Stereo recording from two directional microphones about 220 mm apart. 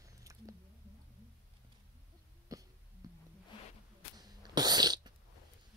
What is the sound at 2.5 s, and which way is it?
Cough, 15° right (ahead or behind).